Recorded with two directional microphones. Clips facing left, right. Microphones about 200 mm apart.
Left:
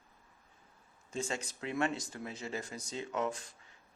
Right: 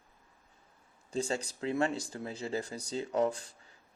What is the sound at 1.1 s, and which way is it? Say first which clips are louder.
Speech: right 5 dB; 35° right (ahead or behind).